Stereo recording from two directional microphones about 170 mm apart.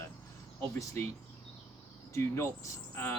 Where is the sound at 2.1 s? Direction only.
15° left (ahead or behind).